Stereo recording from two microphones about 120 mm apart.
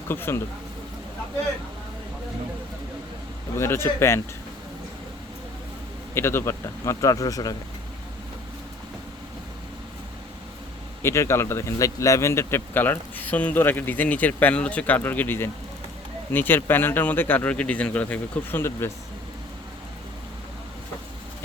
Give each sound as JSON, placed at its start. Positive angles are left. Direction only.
{"t": 0.1, "sound": "speech", "side_deg": 20}
{"t": 3.6, "sound": "speech", "side_deg": 20}
{"t": 6.1, "sound": "speech", "side_deg": 20}
{"t": 11.0, "sound": "a man's voice", "side_deg": 20}